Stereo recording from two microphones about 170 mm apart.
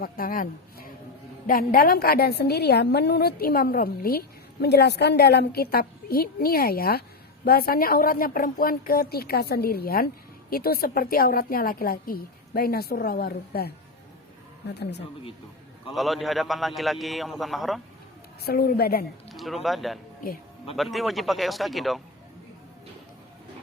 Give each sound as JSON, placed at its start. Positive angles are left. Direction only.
{"t": 0.0, "sound": "a woman's voice", "side_deg": 55}
{"t": 14.7, "sound": "speech", "side_deg": 85}
{"t": 15.9, "sound": "a man's voice", "side_deg": 0}
{"t": 18.4, "sound": "a woman's voice", "side_deg": 65}
{"t": 19.3, "sound": "a man's voice", "side_deg": 0}